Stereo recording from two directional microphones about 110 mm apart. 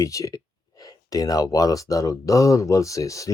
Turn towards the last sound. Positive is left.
turn(degrees=30)  # may be behind; listen again after turning